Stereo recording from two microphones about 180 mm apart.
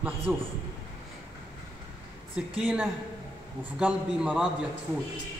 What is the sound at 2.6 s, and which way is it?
A man's voice, 10° right (ahead or behind).